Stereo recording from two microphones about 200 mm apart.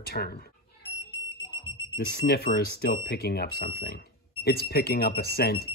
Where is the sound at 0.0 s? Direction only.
50° left (ahead or behind).